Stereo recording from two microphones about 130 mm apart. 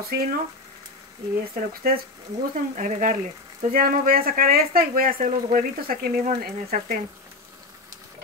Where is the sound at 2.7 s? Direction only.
70° right (ahead or behind).